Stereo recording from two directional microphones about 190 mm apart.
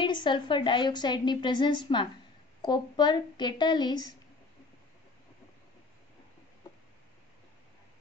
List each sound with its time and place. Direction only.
0.0 s a woman's voice: 25° left (ahead or behind)